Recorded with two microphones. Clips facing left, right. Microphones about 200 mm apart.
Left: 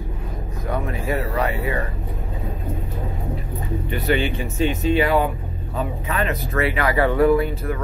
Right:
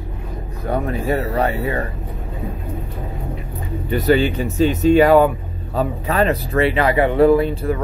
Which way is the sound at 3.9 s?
40° right (ahead or behind).